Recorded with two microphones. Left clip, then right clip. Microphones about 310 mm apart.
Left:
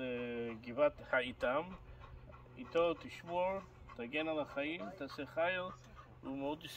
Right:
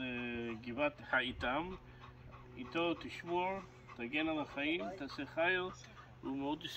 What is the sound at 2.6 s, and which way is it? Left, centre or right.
Speech, centre.